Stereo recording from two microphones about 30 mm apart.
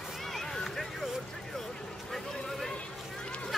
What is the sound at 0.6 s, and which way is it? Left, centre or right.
Vehicle, centre.